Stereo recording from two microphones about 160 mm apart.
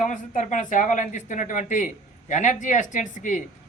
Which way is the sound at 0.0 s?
55° left (ahead or behind).